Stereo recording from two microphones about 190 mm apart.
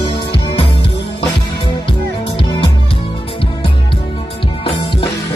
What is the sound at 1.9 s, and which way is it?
Music, 30° left (ahead or behind).